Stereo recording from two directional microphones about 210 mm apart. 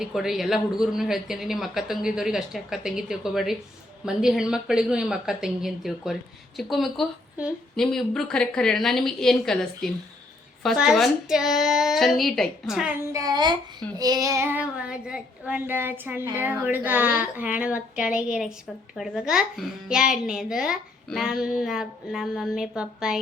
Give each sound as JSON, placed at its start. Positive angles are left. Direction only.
{"t": 0.0, "sound": "a child's voice", "side_deg": 0}
{"t": 13.1, "sound": "a child's voice", "side_deg": -20}
{"t": 14.0, "sound": "child singing", "side_deg": -15}
{"t": 18.9, "sound": "a child's voice", "side_deg": 0}